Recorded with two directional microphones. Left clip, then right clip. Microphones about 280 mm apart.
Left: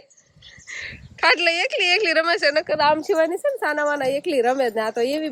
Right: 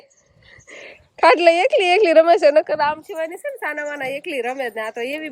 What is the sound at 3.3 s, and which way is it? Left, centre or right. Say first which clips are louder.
A woman's voice: left 4 dB; centre.